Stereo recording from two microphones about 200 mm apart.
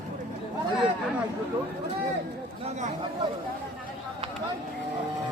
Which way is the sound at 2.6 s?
35° right (ahead or behind).